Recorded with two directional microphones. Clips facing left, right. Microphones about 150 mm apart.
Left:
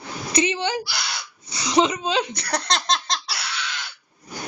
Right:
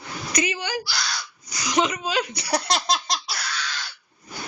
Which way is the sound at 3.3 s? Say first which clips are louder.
Even; 25° left (ahead or behind).